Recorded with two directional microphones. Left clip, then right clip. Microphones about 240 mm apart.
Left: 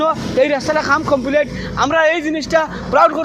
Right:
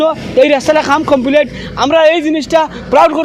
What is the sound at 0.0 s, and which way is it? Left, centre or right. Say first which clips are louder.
A man's voice: right 5 dB; right.